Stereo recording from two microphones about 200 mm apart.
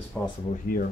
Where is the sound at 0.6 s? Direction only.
45° left (ahead or behind).